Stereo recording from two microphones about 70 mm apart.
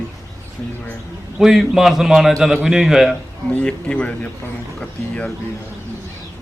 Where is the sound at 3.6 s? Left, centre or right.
Centre.